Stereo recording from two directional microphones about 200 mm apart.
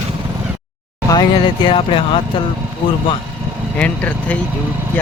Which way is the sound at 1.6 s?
25° left (ahead or behind).